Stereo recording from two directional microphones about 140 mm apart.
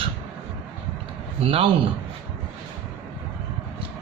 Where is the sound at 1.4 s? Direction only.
40° right (ahead or behind).